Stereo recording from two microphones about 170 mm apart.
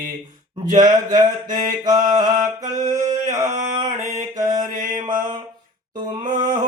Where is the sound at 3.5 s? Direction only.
45° right (ahead or behind).